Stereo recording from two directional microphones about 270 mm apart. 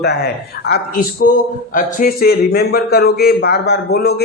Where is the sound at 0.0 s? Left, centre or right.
Left.